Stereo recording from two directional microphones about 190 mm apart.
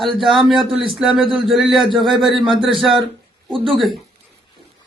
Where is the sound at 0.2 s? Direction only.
Centre (ahead or behind).